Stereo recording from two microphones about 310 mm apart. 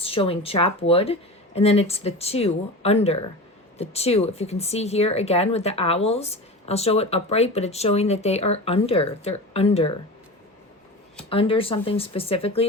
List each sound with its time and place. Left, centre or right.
0.0 s speech: centre
11.3 s speech: centre